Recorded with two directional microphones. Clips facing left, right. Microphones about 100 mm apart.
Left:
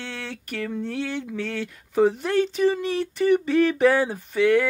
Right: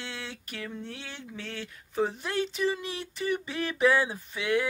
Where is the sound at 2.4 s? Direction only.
45° left (ahead or behind).